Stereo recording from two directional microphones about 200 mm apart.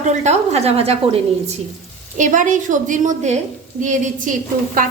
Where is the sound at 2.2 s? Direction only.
40° right (ahead or behind).